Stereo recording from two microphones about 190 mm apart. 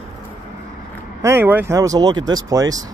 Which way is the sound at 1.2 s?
10° right (ahead or behind).